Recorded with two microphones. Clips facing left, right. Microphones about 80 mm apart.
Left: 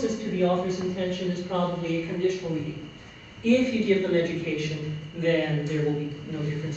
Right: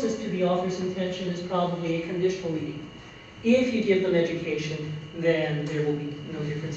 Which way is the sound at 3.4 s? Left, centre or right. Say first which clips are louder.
Even; centre.